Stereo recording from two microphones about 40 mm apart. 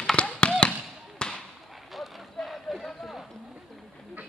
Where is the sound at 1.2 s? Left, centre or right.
Left.